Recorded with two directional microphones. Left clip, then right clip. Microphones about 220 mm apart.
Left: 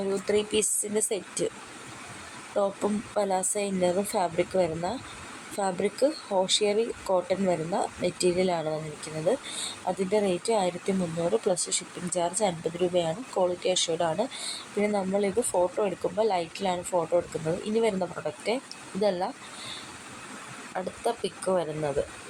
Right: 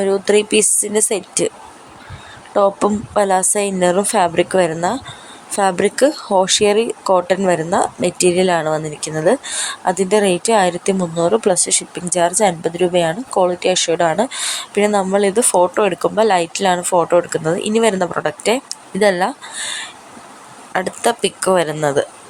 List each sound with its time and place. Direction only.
0.0 s speech: 20° right (ahead or behind)
2.6 s speech: 25° right (ahead or behind)
20.7 s speech: 25° right (ahead or behind)